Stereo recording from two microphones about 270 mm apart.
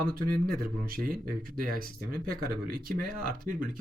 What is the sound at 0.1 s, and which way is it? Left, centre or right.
Speech, right.